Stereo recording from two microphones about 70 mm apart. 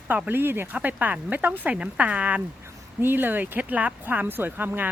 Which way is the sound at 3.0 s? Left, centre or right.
Right.